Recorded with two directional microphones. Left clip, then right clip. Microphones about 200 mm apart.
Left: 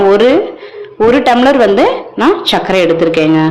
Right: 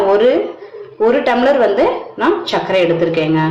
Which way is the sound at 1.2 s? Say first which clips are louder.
Left 4 dB; 40° left (ahead or behind).